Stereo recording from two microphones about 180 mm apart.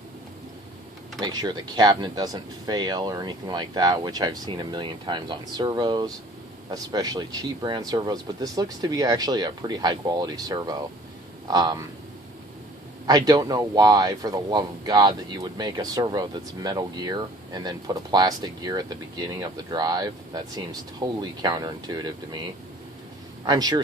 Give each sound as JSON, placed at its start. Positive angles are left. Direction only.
{"t": 1.2, "sound": "speech", "side_deg": -25}
{"t": 13.0, "sound": "speech", "side_deg": -20}